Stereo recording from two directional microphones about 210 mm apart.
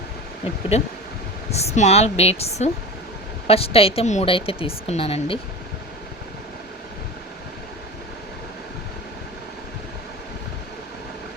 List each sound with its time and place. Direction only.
0.7 s a woman's voice: 30° left (ahead or behind)